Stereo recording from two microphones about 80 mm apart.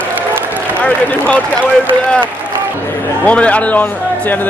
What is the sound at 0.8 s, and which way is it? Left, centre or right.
Speech, centre.